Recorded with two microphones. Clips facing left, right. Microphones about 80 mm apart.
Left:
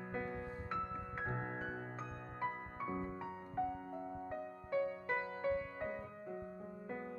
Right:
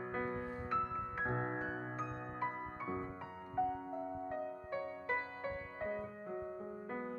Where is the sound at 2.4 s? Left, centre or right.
Centre.